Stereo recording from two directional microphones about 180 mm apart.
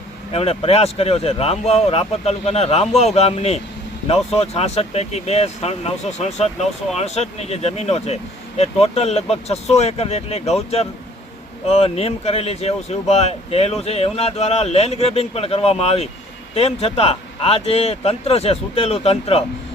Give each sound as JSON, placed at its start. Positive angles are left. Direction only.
{"t": 0.3, "sound": "speech", "side_deg": 35}